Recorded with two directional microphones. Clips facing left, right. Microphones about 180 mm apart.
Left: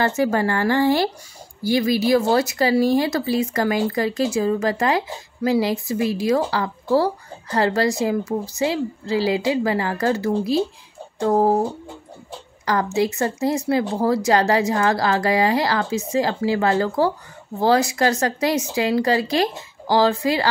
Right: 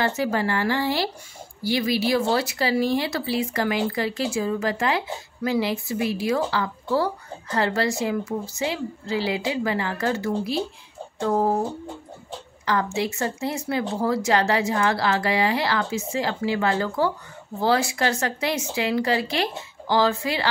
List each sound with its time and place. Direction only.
0.0 s speech: 45° left (ahead or behind)
12.9 s speech: 40° left (ahead or behind)